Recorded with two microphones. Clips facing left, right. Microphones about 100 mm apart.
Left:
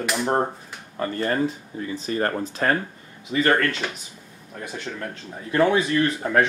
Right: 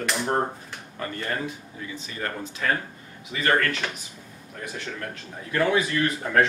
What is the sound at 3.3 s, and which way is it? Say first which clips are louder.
Speech: left 3 dB; 30° left (ahead or behind).